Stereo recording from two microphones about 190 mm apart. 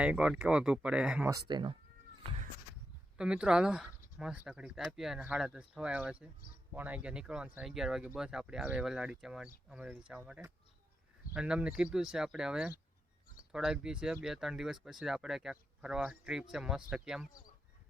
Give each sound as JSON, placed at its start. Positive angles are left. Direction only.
{"t": 0.0, "sound": "speech", "side_deg": -5}
{"t": 1.3, "sound": "speech", "side_deg": -25}
{"t": 3.2, "sound": "speech", "side_deg": -5}